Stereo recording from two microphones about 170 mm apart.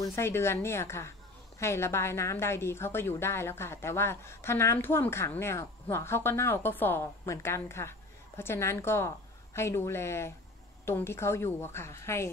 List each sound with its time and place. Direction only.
0.0 s a woman's voice: 15° left (ahead or behind)